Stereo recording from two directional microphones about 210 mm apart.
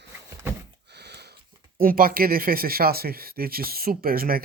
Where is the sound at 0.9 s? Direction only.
50° right (ahead or behind).